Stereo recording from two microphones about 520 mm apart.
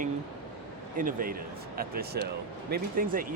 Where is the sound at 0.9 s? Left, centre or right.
Centre.